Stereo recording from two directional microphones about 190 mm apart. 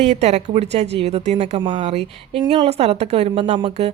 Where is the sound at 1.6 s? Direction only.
25° right (ahead or behind).